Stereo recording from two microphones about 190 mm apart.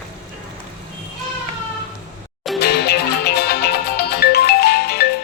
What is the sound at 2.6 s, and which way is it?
Music, 60° left (ahead or behind).